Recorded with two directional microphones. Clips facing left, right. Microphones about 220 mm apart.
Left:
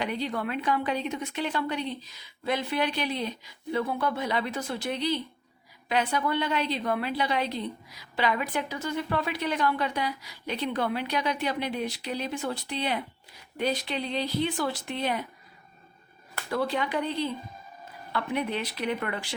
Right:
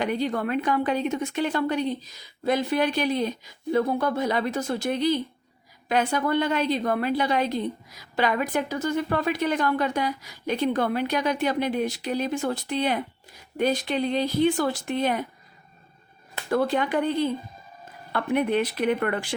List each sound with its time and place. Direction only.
0.0 s a woman's voice: 45° right (ahead or behind)
16.5 s a woman's voice: 50° right (ahead or behind)